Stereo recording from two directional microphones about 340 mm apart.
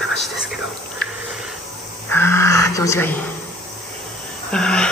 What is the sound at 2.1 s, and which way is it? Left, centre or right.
Speech, centre.